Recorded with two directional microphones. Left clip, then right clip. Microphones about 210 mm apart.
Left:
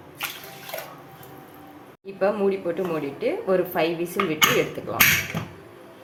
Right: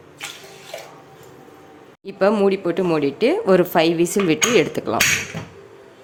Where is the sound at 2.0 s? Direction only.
55° right (ahead or behind).